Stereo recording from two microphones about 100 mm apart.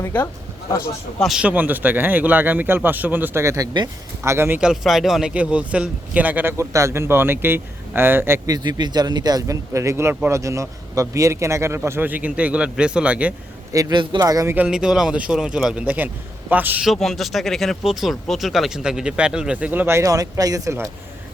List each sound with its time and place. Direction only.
1.2 s speech: 5° right (ahead or behind)
1.5 s a man's voice: 15° right (ahead or behind)
3.4 s a man's voice: 30° right (ahead or behind)
4.6 s speech: 5° right (ahead or behind)
5.3 s speech: 15° right (ahead or behind)
6.6 s a man's voice: 30° right (ahead or behind)
8.4 s a man's voice: 45° right (ahead or behind); by 13.3 s 10° right (ahead or behind)
13.9 s speech: 55° right (ahead or behind)
14.2 s speech: 35° right (ahead or behind)
14.5 s speech: 10° right (ahead or behind)
16.8 s speech: centre (ahead or behind); by 20.0 s 20° right (ahead or behind)
20.0 s speech: 35° right (ahead or behind)